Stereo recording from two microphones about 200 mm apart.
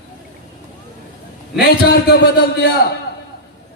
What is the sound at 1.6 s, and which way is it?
Speech, 55° left (ahead or behind).